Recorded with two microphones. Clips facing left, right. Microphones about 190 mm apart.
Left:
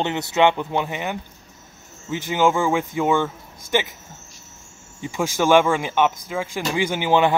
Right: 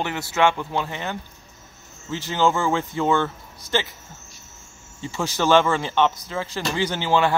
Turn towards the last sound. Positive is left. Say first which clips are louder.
# left 2 dB
turn(degrees=20)  # may be behind; listen again after turning